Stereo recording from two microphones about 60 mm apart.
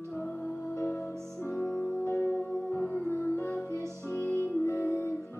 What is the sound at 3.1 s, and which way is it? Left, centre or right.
Music, left.